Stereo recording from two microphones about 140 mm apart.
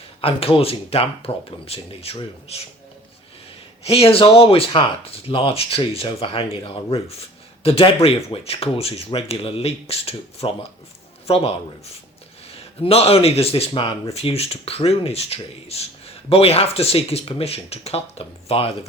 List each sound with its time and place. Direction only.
0.2 s speech: 45° left (ahead or behind)
3.8 s speech: 45° left (ahead or behind)
12.5 s speech: 45° left (ahead or behind)